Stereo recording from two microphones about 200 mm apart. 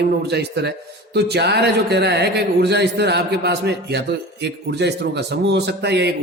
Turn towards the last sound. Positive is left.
turn(degrees=-55)  # may be behind; listen again after turning